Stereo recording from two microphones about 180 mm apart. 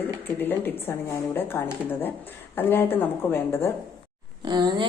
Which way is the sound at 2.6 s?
10° left (ahead or behind).